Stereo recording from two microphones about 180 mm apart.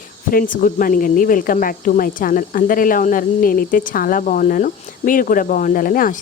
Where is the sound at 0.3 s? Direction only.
50° left (ahead or behind).